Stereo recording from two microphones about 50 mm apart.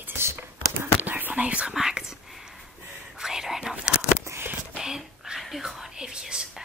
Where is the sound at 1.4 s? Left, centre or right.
Right.